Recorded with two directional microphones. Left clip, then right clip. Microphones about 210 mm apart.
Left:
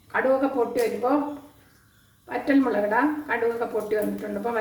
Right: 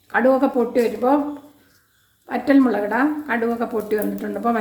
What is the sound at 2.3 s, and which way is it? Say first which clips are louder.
Speech: right 5 dB; 40° right (ahead or behind).